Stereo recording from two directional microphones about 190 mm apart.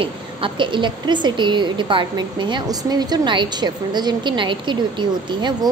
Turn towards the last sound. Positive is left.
turn(degrees=-25)  # may be behind; listen again after turning